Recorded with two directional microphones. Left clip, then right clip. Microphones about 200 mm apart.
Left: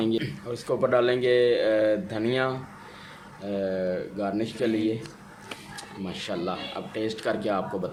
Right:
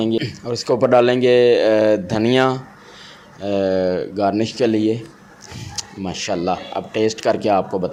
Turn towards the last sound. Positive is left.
turn(degrees=-30)  # may be behind; listen again after turning